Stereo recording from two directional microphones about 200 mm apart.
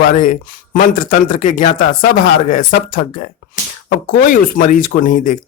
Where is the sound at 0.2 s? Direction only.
45° left (ahead or behind).